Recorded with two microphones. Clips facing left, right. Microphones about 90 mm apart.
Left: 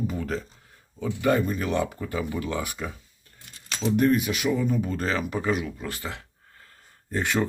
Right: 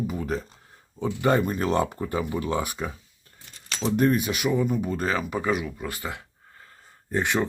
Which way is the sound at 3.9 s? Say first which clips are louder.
Left 1 dB; 25° right (ahead or behind).